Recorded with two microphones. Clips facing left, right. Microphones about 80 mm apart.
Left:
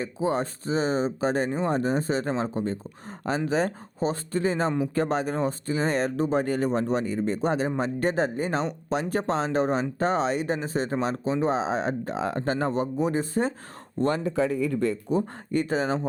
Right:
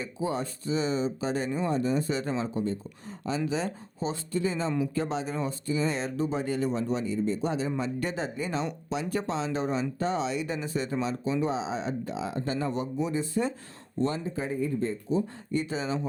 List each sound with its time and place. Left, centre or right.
0.2 s speech: left
14.0 s speech: left
15.1 s speech: left